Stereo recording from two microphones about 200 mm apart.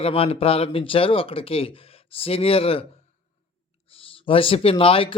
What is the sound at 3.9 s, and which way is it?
Speech, 25° left (ahead or behind).